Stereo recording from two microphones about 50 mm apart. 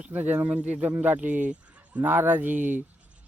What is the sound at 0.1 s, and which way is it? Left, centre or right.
Speech, right.